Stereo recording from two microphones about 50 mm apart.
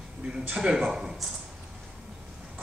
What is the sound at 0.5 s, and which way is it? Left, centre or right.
Speech, centre.